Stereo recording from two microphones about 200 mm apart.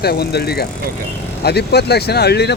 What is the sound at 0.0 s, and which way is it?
Speech, 55° left (ahead or behind).